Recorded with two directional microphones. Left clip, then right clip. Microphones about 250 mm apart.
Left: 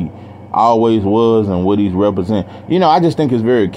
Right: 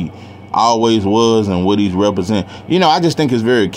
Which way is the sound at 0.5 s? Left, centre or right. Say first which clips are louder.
Left 1 dB; centre.